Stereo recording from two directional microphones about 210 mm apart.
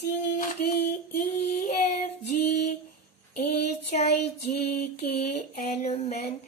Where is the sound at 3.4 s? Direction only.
30° left (ahead or behind).